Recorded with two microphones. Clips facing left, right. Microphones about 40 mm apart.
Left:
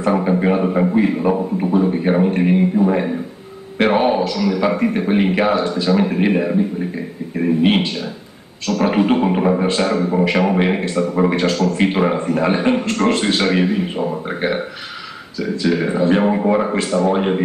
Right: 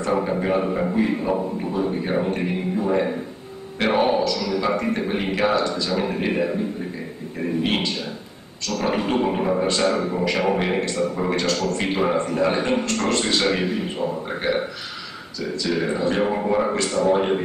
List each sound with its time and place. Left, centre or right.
0.1 s a man's voice: centre
11.5 s a man's voice: centre
11.8 s a man's voice: centre